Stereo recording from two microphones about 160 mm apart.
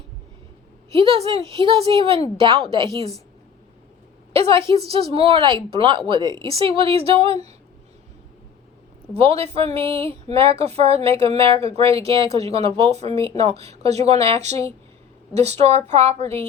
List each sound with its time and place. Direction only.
0.9 s speech: 40° right (ahead or behind)
4.3 s a woman's voice: 35° right (ahead or behind)
9.1 s speech: 40° right (ahead or behind)
16.2 s a woman's voice: 15° left (ahead or behind)